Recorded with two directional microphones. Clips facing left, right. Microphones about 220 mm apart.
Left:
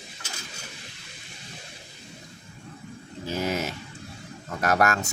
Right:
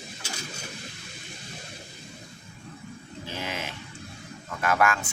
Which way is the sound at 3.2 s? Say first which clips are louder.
Left 7 dB; 40° left (ahead or behind).